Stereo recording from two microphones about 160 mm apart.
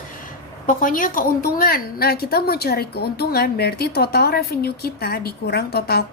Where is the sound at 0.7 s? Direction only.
55° left (ahead or behind).